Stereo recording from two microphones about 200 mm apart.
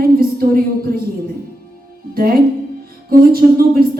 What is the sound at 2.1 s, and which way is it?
A woman's voice, 50° right (ahead or behind).